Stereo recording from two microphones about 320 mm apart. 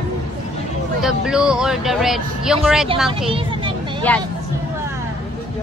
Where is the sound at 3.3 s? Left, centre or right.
Centre.